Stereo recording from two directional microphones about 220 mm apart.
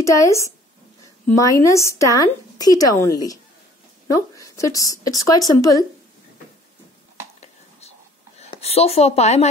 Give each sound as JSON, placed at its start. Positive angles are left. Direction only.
{"t": 0.0, "sound": "a woman's voice", "side_deg": 15}
{"t": 8.4, "sound": "speech", "side_deg": 30}